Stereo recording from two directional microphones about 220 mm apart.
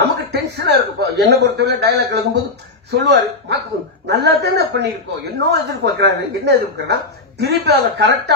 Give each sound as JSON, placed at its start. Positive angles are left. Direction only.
{"t": 0.0, "sound": "a man's voice", "side_deg": -50}